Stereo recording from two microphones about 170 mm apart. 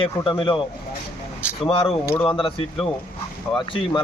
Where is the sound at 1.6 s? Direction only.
30° left (ahead or behind).